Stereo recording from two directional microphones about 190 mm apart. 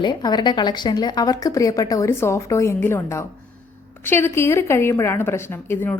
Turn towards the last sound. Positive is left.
turn(degrees=10)  # may be behind; listen again after turning